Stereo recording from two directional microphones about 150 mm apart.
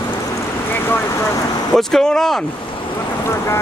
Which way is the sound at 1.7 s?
5° left (ahead or behind).